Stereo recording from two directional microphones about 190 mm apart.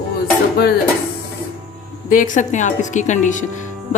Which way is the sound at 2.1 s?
45° left (ahead or behind).